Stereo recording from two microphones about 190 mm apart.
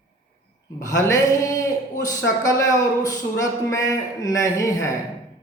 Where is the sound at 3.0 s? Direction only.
20° left (ahead or behind).